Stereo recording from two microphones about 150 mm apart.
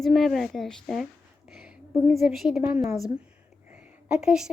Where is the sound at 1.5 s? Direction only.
5° right (ahead or behind).